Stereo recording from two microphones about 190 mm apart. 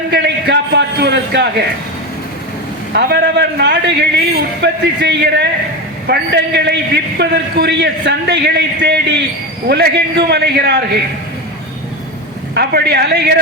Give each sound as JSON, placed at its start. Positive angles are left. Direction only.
{"t": 0.1, "sound": "a sound", "side_deg": -60}
{"t": 2.9, "sound": "a man's voice", "side_deg": -60}
{"t": 12.5, "sound": "a man's voice", "side_deg": -60}